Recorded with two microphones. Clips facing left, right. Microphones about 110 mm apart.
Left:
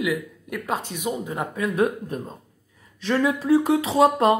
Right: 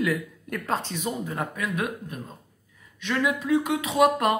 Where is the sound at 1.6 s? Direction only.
35° left (ahead or behind).